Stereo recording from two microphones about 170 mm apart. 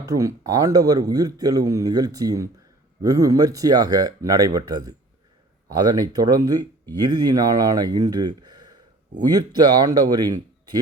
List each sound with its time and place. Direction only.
0.0 s speech: 20° right (ahead or behind)